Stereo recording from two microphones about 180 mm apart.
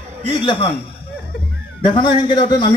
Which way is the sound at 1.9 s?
25° left (ahead or behind).